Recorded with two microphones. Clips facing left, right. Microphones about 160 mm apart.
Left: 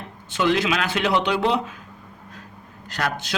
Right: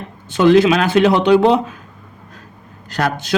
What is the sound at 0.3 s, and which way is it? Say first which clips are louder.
Speech: right 10 dB; 35° right (ahead or behind).